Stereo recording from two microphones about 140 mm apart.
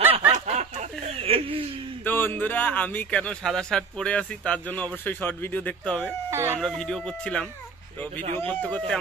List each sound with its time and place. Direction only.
0.3 s a sound: 50° right (ahead or behind)
2.0 s a man's voice: 15° left (ahead or behind)
6.3 s speech: 20° right (ahead or behind)
6.6 s a man's voice: 5° left (ahead or behind)